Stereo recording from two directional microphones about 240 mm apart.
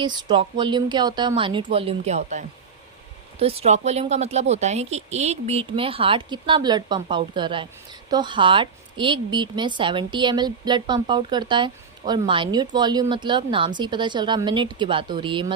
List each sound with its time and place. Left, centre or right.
0.0 s a woman's voice: centre
3.4 s a woman's voice: right